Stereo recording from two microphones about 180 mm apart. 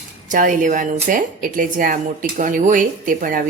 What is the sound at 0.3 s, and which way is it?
A woman's voice, 45° right (ahead or behind).